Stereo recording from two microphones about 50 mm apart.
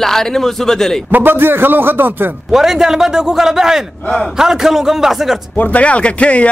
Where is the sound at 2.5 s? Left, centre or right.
Centre.